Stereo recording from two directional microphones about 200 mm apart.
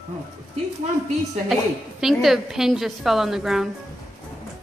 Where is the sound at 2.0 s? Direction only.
Centre (ahead or behind).